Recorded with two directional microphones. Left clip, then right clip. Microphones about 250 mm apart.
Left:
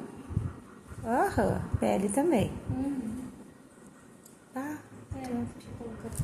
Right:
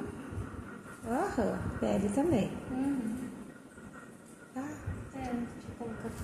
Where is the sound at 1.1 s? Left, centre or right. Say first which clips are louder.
Left 5 dB; left.